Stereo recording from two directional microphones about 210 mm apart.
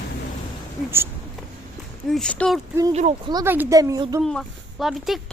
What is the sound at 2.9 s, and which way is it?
Speech, 30° right (ahead or behind).